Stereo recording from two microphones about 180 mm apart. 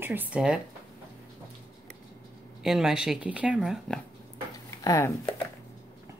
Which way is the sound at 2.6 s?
Centre (ahead or behind).